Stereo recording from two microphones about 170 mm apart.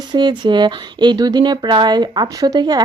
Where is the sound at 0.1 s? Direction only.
25° right (ahead or behind).